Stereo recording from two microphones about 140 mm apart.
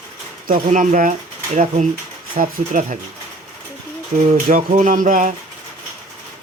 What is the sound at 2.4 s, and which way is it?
Speech, 70° right (ahead or behind).